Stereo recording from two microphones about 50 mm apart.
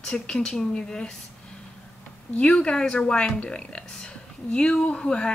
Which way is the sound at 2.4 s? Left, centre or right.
Centre.